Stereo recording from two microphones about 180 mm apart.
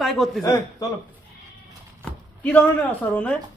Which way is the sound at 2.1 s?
5° left (ahead or behind).